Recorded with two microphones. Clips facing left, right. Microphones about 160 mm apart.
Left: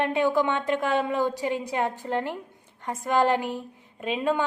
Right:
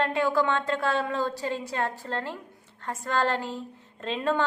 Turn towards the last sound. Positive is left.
turn(degrees=10)  # may be behind; listen again after turning